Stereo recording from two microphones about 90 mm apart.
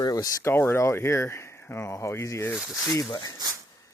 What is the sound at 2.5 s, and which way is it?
Speech, centre (ahead or behind).